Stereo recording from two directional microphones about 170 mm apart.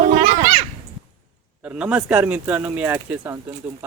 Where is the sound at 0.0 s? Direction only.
45° right (ahead or behind).